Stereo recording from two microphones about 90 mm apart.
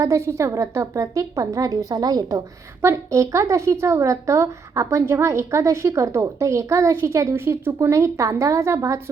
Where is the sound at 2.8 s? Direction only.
35° right (ahead or behind).